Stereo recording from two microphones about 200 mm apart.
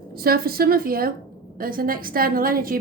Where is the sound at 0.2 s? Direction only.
50° right (ahead or behind).